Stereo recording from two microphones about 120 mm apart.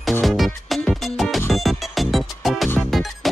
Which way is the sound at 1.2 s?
Centre (ahead or behind).